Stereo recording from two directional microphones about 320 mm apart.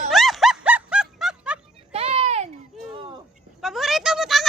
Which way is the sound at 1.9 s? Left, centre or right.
Centre.